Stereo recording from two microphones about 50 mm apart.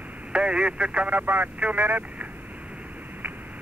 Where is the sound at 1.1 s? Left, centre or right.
Right.